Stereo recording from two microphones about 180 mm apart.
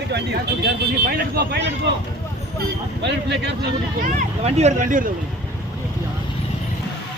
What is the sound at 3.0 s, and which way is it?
Speech, 70° right (ahead or behind).